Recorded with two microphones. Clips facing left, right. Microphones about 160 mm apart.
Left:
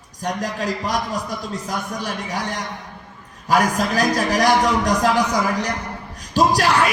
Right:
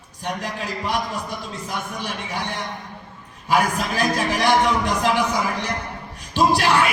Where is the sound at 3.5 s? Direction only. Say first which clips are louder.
Left 2 dB; 40° left (ahead or behind).